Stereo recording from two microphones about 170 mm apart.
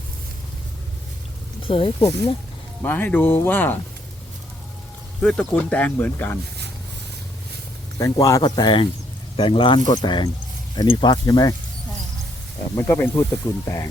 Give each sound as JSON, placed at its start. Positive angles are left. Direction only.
{"t": 1.6, "sound": "speech", "side_deg": 30}
{"t": 2.8, "sound": "speech", "side_deg": 10}
{"t": 5.2, "sound": "speech", "side_deg": 5}
{"t": 7.9, "sound": "speech", "side_deg": 20}
{"t": 12.7, "sound": "speech", "side_deg": 15}